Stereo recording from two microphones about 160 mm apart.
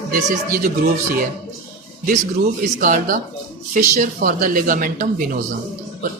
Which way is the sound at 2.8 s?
55° right (ahead or behind).